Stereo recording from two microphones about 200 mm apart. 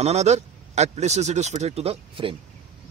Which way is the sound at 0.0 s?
35° right (ahead or behind).